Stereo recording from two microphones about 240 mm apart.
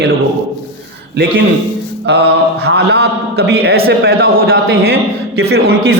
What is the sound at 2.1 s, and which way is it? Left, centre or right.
A man's voice, right.